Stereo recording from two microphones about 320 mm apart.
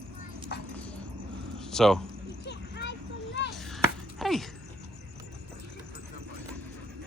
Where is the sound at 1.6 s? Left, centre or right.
Centre.